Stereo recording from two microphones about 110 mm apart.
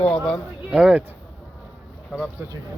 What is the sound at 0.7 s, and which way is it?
Speech, 5° right (ahead or behind).